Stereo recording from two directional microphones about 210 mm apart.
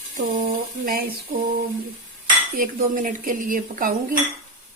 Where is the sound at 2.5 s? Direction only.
40° right (ahead or behind).